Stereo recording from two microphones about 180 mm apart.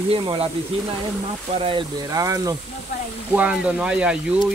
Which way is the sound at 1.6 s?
30° right (ahead or behind).